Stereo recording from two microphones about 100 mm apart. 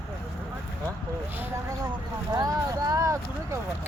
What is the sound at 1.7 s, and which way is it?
Vehicle, 40° right (ahead or behind).